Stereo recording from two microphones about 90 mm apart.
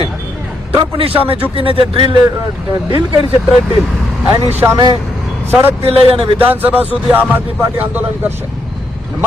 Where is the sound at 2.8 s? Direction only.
90° left.